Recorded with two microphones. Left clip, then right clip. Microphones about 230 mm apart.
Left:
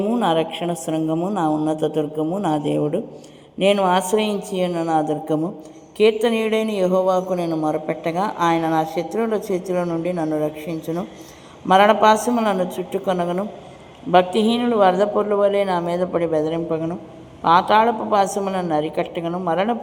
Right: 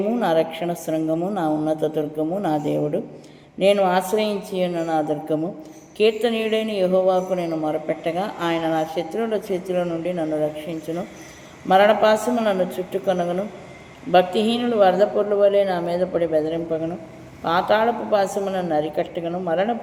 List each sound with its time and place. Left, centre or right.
0.1 s a woman's voice: centre